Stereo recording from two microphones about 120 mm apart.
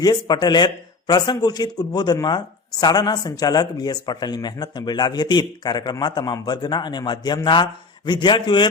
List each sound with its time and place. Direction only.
0.0 s speech: 35° left (ahead or behind)